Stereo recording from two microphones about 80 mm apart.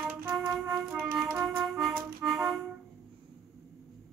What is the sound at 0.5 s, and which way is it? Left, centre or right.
Music, centre.